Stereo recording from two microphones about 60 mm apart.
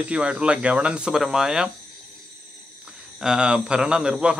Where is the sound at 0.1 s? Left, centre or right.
Centre.